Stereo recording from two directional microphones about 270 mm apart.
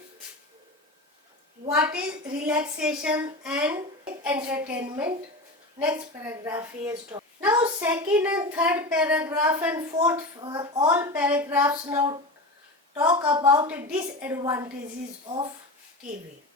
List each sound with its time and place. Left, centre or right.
1.7 s a woman's voice: centre
13.7 s a woman's voice: centre